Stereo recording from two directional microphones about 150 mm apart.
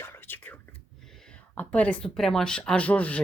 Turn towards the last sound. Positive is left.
turn(degrees=10)  # may be behind; listen again after turning